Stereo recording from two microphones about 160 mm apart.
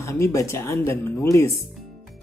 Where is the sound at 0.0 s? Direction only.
15° left (ahead or behind).